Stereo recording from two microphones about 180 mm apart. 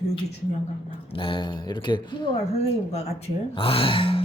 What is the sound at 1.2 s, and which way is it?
Speech, 25° left (ahead or behind).